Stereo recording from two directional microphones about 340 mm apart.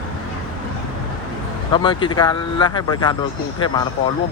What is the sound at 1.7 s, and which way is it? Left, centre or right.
Speech, centre.